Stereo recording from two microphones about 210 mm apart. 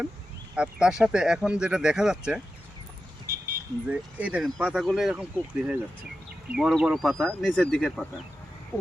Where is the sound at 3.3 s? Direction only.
45° right (ahead or behind).